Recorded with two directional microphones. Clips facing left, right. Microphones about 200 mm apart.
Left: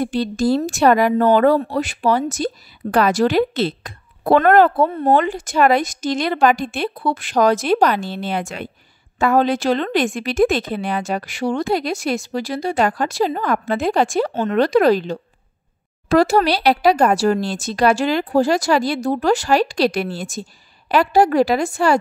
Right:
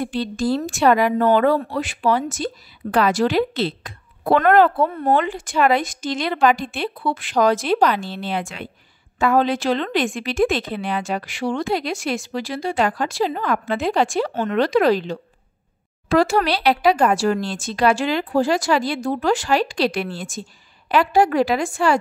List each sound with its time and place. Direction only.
0.0 s a woman's voice: 40° left (ahead or behind)
4.8 s speech: 25° left (ahead or behind)
5.1 s a woman's voice: 40° left (ahead or behind)